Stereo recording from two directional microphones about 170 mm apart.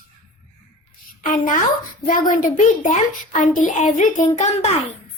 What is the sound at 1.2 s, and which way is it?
A woman's voice, 50° left (ahead or behind).